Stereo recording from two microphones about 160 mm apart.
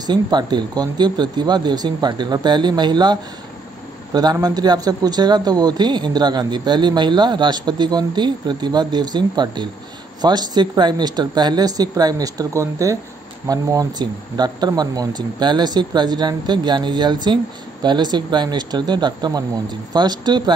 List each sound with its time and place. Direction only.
0.0 s a man's voice: 25° right (ahead or behind)